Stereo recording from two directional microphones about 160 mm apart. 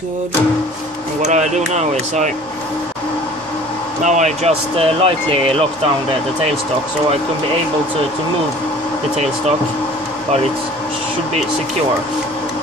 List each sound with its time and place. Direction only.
1.2 s speech: 45° right (ahead or behind)
4.0 s speech: 50° right (ahead or behind)